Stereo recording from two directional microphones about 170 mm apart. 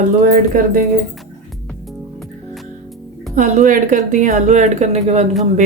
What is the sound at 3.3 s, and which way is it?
Speech, 50° right (ahead or behind).